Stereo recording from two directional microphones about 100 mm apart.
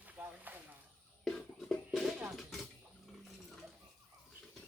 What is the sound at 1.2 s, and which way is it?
Music, 5° left (ahead or behind).